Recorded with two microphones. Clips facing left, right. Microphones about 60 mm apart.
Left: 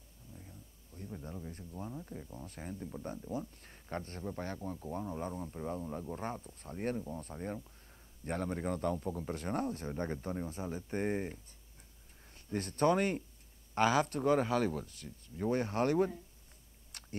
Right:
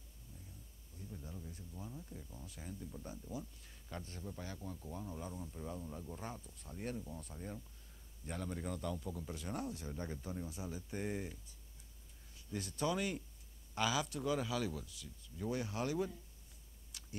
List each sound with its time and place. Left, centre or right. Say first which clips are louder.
1.0 s speech: left 6 dB; left
2.4 s speech: left 4 dB; left
12.4 s speech: left 8 dB; left
16.9 s a sound: left 4 dB; left